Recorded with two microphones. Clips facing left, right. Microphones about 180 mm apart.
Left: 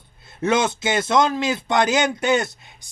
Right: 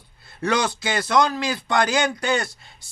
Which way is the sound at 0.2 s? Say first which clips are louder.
Left 3 dB; 20° left (ahead or behind).